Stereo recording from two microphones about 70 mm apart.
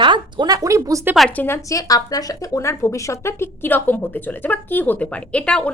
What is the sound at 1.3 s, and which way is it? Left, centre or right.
Speech, left.